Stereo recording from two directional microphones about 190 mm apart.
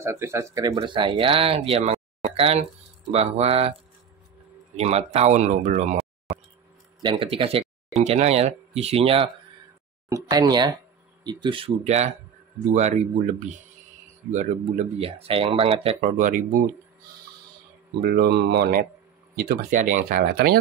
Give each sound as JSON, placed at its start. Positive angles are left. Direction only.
{"t": 0.0, "sound": "speech", "side_deg": -15}
{"t": 4.7, "sound": "speech", "side_deg": -35}
{"t": 7.0, "sound": "speech", "side_deg": -25}
{"t": 10.0, "sound": "speech", "side_deg": -20}
{"t": 18.0, "sound": "speech", "side_deg": -55}